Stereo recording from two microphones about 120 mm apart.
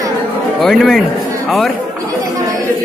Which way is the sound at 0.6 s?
Centre (ahead or behind).